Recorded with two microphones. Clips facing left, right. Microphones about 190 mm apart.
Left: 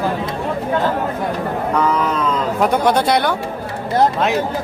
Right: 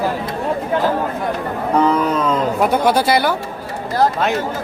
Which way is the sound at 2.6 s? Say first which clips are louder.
Left 1 dB; 5° right (ahead or behind).